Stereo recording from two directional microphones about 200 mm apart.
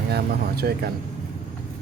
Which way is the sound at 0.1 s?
50° right (ahead or behind).